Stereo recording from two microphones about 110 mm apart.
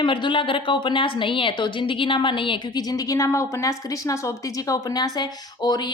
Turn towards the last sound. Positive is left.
turn(degrees=40)  # may be behind; listen again after turning